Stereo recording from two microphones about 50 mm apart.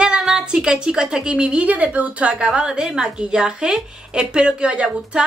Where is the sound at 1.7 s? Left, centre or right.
Right.